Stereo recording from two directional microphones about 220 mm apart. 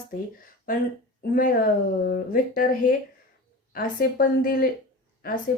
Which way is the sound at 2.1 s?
40° left (ahead or behind).